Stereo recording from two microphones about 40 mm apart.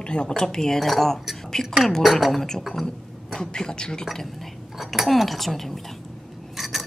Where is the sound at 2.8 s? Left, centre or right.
Centre.